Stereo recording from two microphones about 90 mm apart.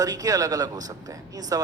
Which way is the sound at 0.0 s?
45° right (ahead or behind).